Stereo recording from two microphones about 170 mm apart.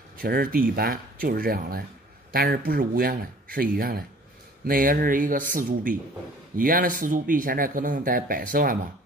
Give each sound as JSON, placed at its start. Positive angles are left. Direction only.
{"t": 0.2, "sound": "speech", "side_deg": -60}